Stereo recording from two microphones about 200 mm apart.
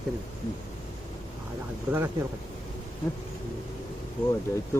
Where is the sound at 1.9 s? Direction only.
10° right (ahead or behind).